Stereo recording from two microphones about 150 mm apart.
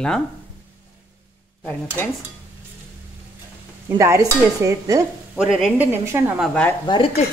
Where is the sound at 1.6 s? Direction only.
10° left (ahead or behind).